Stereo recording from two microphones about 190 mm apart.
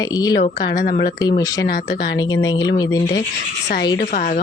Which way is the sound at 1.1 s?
20° left (ahead or behind).